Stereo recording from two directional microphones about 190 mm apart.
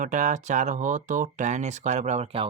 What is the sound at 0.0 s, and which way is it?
Speech, 40° right (ahead or behind).